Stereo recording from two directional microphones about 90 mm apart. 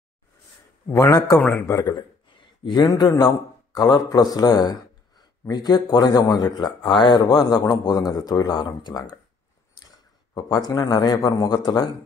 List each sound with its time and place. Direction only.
0.8 s a man's voice: 35° left (ahead or behind)
2.0 s a man's voice: 65° left (ahead or behind); by 11.9 s 50° left (ahead or behind)